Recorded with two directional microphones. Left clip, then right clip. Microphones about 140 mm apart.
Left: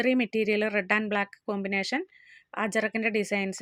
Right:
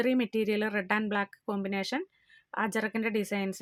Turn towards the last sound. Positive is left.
turn(degrees=20)  # may be behind; listen again after turning